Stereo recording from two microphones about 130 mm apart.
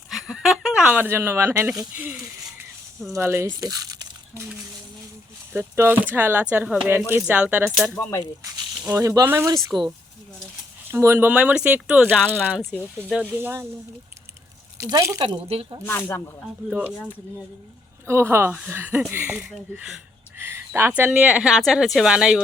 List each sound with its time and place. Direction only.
0.1 s a sound: centre (ahead or behind)
2.0 s speech: 15° right (ahead or behind)
3.6 s a sound: 30° right (ahead or behind)
5.5 s speech: 20° right (ahead or behind)
7.9 s speech: 20° left (ahead or behind)
8.9 s speech: 25° right (ahead or behind)
10.9 s speech: 20° right (ahead or behind)
14.8 s speech: 25° right (ahead or behind)
15.2 s speech: 45° right (ahead or behind)
15.9 s speech: 20° left (ahead or behind)
16.6 s speech: 10° right (ahead or behind)
18.0 s speech: 20° right (ahead or behind)